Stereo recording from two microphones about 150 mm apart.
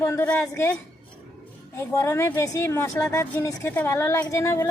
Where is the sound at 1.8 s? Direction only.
20° left (ahead or behind).